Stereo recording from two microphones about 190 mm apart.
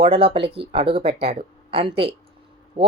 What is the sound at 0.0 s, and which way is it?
Speech, 30° right (ahead or behind).